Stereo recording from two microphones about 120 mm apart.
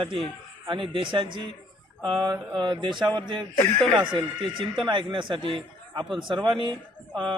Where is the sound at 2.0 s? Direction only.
35° right (ahead or behind).